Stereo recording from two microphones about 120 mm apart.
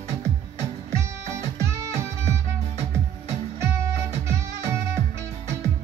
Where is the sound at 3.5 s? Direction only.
25° right (ahead or behind).